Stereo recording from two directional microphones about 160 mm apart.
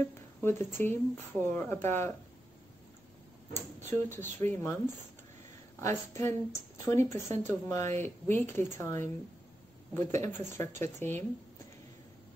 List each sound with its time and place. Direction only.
0.4 s speech: 15° left (ahead or behind)
3.5 s speech: 15° left (ahead or behind)
5.8 s speech: 15° left (ahead or behind)